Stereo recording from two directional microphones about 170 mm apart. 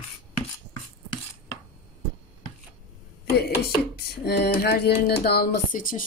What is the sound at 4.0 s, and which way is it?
Speech, 65° left (ahead or behind).